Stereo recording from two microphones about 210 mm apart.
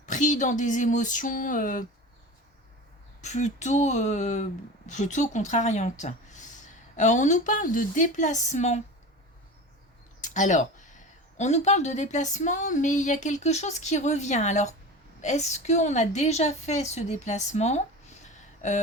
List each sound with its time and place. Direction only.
0.0 s speech: 35° left (ahead or behind)
3.2 s speech: 35° left (ahead or behind)
10.2 s speech: 35° left (ahead or behind)